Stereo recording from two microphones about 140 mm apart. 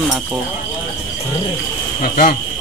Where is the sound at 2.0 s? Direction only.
90° left.